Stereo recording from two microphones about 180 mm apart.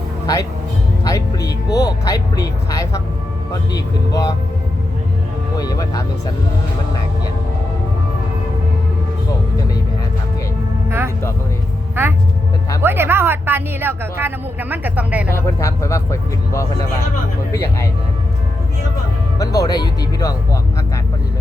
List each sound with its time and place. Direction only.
1.0 s speech: 20° left (ahead or behind)
5.5 s speech: 20° left (ahead or behind)
10.8 s music: 15° right (ahead or behind)
12.0 s speech: 10° right (ahead or behind)
15.4 s speech: 15° left (ahead or behind)
19.4 s speech: 20° left (ahead or behind)